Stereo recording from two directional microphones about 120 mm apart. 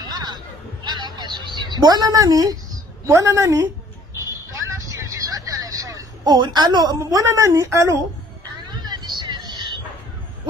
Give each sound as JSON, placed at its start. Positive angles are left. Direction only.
{"t": 0.0, "sound": "a sound", "side_deg": -35}
{"t": 7.0, "sound": "a woman's voice", "side_deg": -25}
{"t": 8.8, "sound": "vehicle", "side_deg": -35}